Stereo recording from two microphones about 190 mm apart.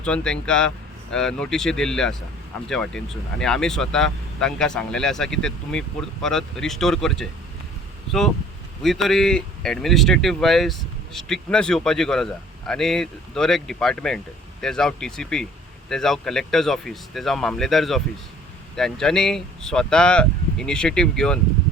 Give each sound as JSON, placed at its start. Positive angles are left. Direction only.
{"t": 0.0, "sound": "speech", "side_deg": 5}